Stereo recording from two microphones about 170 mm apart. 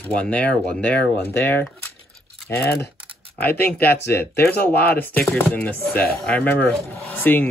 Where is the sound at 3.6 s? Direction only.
70° left (ahead or behind).